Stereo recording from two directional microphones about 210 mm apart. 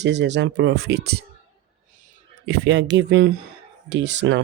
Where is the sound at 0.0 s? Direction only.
55° right (ahead or behind).